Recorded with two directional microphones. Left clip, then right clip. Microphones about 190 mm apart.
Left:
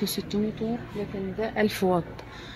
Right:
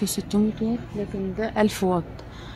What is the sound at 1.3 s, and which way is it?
Speech, 30° right (ahead or behind).